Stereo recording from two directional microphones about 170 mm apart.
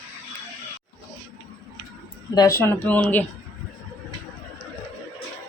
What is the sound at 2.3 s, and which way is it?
Speech, 20° left (ahead or behind).